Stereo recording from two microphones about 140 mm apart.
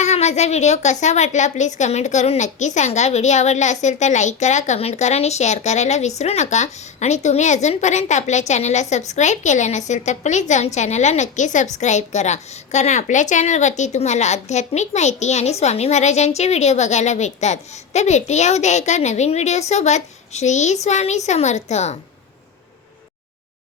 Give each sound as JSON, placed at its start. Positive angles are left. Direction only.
{"t": 0.0, "sound": "a woman's voice", "side_deg": 55}